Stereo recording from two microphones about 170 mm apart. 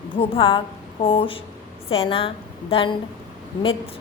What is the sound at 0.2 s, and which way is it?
A woman's voice, 30° left (ahead or behind).